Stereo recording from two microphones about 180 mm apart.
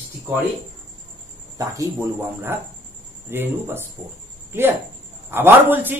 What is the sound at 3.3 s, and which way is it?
A man's voice, 10° right (ahead or behind).